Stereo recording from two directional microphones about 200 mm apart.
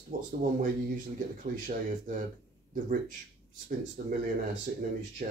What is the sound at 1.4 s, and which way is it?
Speech, 40° right (ahead or behind).